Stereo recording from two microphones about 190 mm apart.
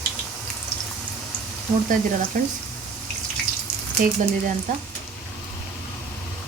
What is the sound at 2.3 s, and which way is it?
Speech, 45° right (ahead or behind).